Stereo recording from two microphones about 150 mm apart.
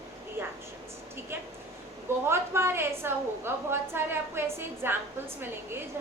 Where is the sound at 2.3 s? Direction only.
15° right (ahead or behind).